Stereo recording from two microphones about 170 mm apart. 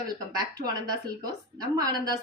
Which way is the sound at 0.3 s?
20° right (ahead or behind).